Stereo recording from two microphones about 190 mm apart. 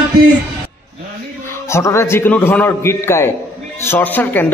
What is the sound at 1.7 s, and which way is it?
A man's voice, 15° left (ahead or behind).